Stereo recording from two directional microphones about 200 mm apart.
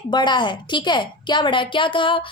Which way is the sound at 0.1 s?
20° left (ahead or behind).